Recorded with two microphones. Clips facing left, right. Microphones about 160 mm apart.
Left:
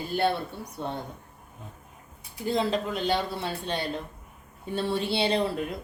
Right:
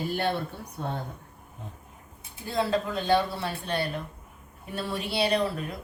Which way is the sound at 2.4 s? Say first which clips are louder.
Left 1 dB; 20° left (ahead or behind).